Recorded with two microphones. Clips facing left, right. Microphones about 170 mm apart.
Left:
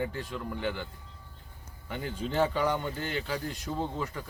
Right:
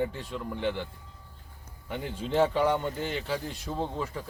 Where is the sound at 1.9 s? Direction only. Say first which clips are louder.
Right 2 dB; centre (ahead or behind).